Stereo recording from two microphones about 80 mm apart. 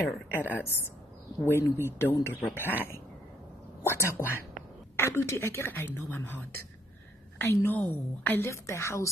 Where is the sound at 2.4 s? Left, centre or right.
Left.